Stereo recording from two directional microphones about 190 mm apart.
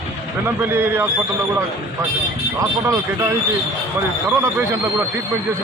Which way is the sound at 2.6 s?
15° right (ahead or behind).